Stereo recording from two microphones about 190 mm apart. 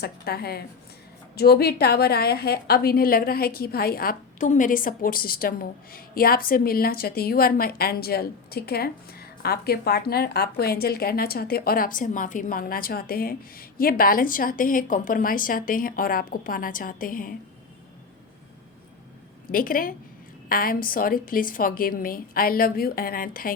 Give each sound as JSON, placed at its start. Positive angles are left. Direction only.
{"t": 0.0, "sound": "a woman's voice", "side_deg": 55}
{"t": 19.5, "sound": "a woman's voice", "side_deg": 45}